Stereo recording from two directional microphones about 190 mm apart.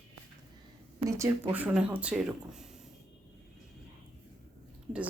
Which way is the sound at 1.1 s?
15° right (ahead or behind).